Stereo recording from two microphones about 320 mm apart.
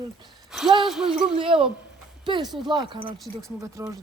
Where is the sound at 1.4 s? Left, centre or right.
Centre.